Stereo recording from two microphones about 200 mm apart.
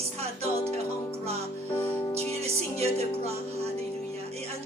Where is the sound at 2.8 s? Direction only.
30° right (ahead or behind).